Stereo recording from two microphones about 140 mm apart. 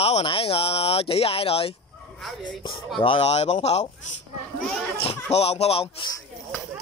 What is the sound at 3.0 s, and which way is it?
Speech, 40° left (ahead or behind).